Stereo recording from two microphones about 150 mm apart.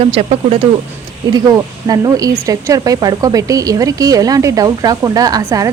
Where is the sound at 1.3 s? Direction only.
25° right (ahead or behind).